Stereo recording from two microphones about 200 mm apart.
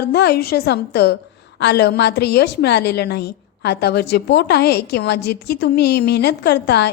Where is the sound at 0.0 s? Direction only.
55° left (ahead or behind).